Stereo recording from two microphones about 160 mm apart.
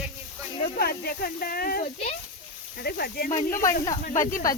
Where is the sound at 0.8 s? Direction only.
70° left (ahead or behind).